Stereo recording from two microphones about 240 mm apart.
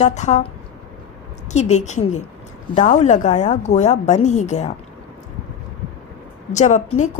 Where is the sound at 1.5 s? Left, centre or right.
Left.